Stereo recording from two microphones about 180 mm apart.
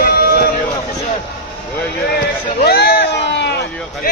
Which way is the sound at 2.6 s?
60° left (ahead or behind).